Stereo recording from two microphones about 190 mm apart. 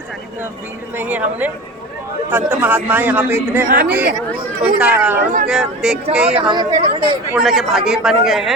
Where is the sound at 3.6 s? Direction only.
55° right (ahead or behind).